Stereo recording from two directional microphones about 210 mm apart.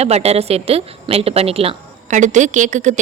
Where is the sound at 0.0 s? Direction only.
30° right (ahead or behind).